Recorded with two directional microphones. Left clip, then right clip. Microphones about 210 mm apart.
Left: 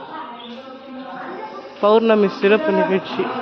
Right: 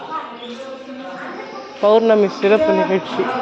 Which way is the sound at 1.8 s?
20° left (ahead or behind).